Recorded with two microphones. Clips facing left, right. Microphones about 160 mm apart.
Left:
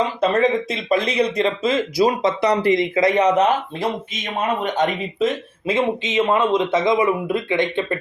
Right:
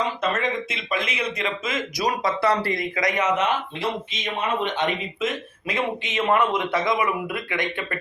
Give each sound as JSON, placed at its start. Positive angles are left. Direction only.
{"t": 0.2, "sound": "speech", "side_deg": 35}
{"t": 5.6, "sound": "a man's voice", "side_deg": 20}